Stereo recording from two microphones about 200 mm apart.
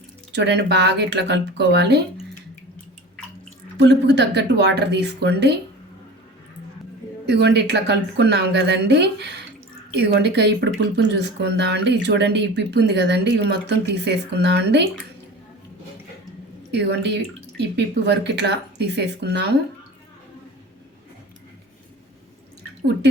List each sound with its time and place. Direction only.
0.3 s speech: 60° right (ahead or behind)
3.8 s speech: 60° right (ahead or behind)
7.3 s speech: 60° right (ahead or behind)
16.7 s speech: 60° right (ahead or behind)